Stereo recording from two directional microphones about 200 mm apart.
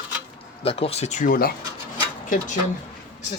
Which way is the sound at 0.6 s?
30° left (ahead or behind).